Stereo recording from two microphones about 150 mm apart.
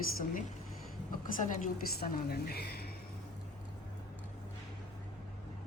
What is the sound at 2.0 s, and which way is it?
Speech, 90° left.